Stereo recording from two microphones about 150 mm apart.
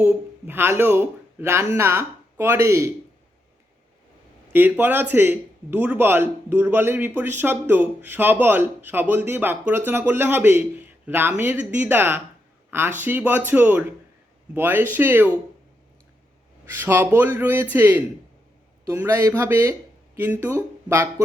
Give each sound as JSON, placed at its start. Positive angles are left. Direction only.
{"t": 0.0, "sound": "a man's voice", "side_deg": -10}
{"t": 4.5, "sound": "speech", "side_deg": -15}
{"t": 16.7, "sound": "speech", "side_deg": -15}